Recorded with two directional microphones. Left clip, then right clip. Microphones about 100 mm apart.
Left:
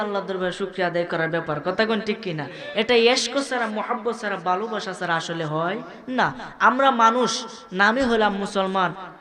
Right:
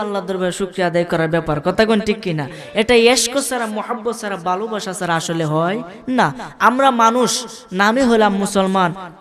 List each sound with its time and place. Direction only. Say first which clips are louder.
0.0 s speech: right 4 dB; 50° right (ahead or behind)